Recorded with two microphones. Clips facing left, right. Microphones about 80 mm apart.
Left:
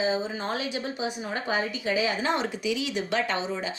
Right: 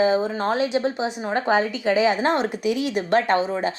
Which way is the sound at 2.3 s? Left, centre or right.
Right.